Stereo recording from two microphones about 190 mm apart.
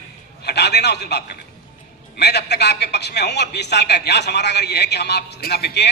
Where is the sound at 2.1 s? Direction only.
60° left (ahead or behind).